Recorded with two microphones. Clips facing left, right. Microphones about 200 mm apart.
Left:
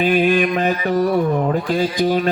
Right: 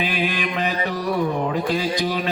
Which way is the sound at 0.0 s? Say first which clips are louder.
Left 9 dB; 45° left (ahead or behind).